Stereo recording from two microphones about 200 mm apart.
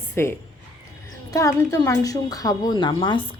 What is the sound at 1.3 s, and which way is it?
Speech, 15° left (ahead or behind).